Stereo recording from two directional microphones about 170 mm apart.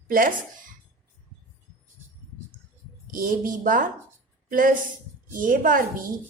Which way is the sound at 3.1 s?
55° right (ahead or behind).